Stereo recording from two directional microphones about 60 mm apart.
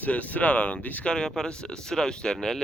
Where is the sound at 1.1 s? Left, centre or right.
Centre.